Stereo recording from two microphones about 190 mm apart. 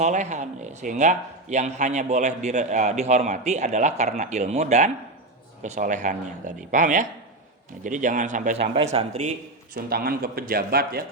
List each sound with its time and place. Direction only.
0.0 s speech: 40° right (ahead or behind)
9.7 s speech: 50° right (ahead or behind)